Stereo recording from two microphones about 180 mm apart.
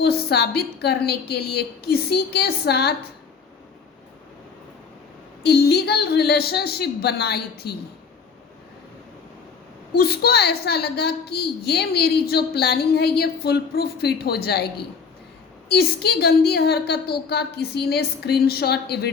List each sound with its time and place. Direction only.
0.0 s a woman's voice: 65° left (ahead or behind)
5.4 s a woman's voice: 65° left (ahead or behind)
10.0 s a woman's voice: 60° left (ahead or behind)
15.7 s a woman's voice: 60° left (ahead or behind)